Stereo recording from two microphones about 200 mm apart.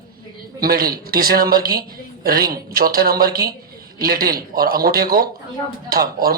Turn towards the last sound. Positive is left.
turn(degrees=-50)  # may be behind; listen again after turning